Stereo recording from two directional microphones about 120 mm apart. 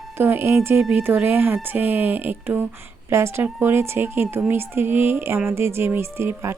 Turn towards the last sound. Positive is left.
turn(degrees=-20)  # may be behind; listen again after turning